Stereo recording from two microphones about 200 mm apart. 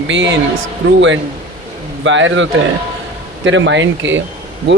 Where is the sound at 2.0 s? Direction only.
70° right (ahead or behind).